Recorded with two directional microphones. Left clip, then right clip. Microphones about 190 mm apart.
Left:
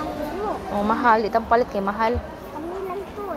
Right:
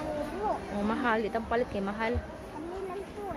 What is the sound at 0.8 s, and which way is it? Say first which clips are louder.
A woman's voice: left 12 dB; 10° right (ahead or behind).